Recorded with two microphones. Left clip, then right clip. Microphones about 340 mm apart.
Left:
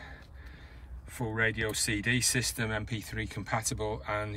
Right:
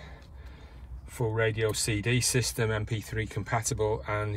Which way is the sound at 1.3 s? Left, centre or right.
Centre.